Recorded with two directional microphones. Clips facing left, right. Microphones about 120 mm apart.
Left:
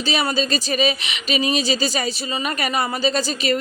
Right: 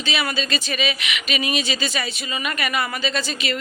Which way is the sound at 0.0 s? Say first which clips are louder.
Left 4 dB; 35° left (ahead or behind).